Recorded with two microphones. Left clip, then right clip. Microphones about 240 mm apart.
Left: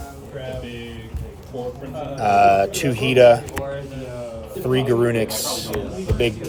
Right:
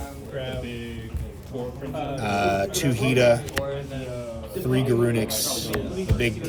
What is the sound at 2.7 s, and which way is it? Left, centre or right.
Speech, left.